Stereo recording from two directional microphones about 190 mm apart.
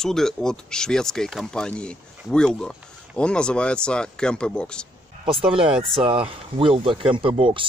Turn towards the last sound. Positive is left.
turn(degrees=-25)  # may be behind; listen again after turning